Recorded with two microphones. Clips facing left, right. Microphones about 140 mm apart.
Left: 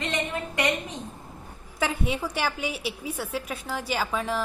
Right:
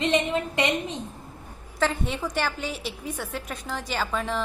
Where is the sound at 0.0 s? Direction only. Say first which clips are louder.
Right 6 dB; 20° right (ahead or behind).